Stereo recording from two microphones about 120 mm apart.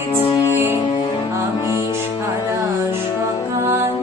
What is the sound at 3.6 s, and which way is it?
Music, 20° right (ahead or behind).